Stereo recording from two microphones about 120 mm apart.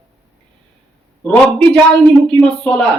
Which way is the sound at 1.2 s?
10° left (ahead or behind).